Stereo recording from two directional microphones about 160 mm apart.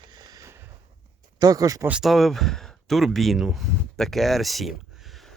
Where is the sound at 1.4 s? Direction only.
25° right (ahead or behind).